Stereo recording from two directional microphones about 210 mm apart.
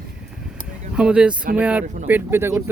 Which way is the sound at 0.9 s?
5° right (ahead or behind).